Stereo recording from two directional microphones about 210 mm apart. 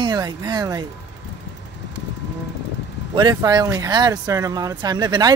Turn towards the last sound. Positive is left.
turn(degrees=-20)  # may be behind; listen again after turning